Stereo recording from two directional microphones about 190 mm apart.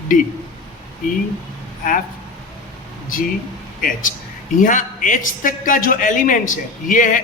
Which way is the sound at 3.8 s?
45° left (ahead or behind).